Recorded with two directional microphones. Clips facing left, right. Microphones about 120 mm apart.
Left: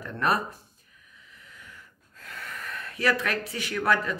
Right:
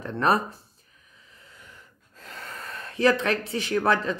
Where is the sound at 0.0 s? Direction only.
25° right (ahead or behind).